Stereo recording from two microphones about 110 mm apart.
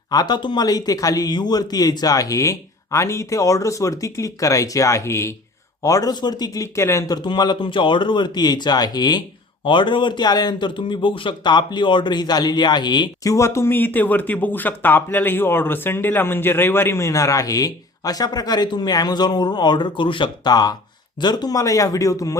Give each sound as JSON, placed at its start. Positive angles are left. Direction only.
{"t": 0.1, "sound": "a man's voice", "side_deg": 40}
{"t": 7.2, "sound": "a man's voice", "side_deg": 40}
{"t": 13.3, "sound": "a man's voice", "side_deg": 25}